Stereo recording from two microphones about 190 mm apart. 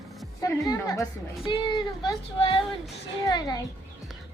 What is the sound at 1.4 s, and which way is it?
Child singing, 25° left (ahead or behind).